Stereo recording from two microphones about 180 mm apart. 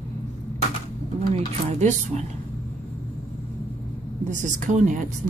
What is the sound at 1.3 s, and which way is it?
Speech, 40° right (ahead or behind).